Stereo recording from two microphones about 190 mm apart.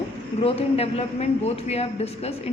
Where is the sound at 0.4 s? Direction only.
30° left (ahead or behind).